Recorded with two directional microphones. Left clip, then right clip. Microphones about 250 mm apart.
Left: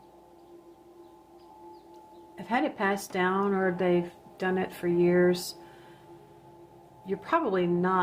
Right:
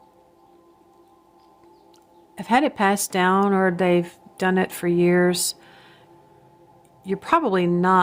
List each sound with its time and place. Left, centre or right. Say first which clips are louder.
2.3 s speech: right 9 dB; right
7.0 s speech: right 7 dB; right